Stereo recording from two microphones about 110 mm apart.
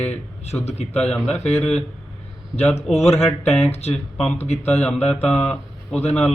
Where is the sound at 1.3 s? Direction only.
75° left (ahead or behind).